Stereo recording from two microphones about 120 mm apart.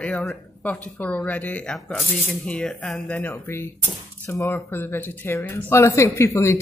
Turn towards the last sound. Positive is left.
turn(degrees=25)  # may be behind; listen again after turning